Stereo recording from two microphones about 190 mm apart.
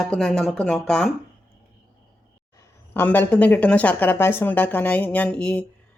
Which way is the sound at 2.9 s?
10° left (ahead or behind).